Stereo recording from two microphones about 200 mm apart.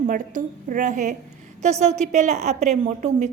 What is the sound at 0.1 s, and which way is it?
A woman's voice, 40° right (ahead or behind).